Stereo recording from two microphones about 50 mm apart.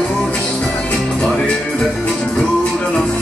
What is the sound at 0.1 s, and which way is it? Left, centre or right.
Music, left.